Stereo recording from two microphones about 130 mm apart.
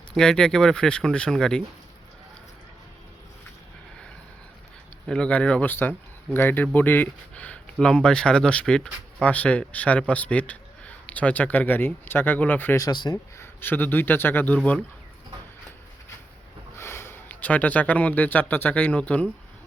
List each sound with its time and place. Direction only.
0.1 s speech: 5° left (ahead or behind)
5.0 s speech: 5° left (ahead or behind)
12.8 s speech: 35° left (ahead or behind)
13.4 s speech: 15° left (ahead or behind)
16.7 s speech: 20° left (ahead or behind)